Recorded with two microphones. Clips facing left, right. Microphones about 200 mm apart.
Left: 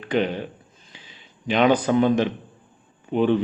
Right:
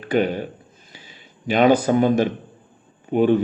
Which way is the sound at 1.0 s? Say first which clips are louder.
Right 2 dB; 45° right (ahead or behind).